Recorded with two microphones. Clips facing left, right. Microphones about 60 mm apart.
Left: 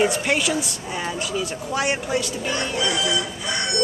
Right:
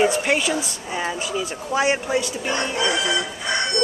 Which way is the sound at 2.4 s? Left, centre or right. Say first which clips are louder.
Right 1 dB; right.